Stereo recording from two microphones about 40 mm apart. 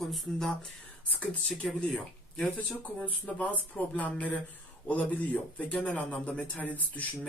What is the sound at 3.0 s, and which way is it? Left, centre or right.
Speech, left.